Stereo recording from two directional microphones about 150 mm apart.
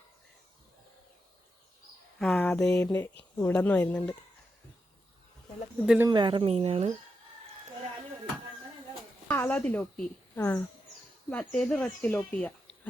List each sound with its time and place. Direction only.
2.1 s a sound: 5° left (ahead or behind)
2.8 s speech: 15° left (ahead or behind)
5.8 s speech: 5° right (ahead or behind)
6.1 s speech: 30° right (ahead or behind)
9.2 s a woman's voice: 10° left (ahead or behind)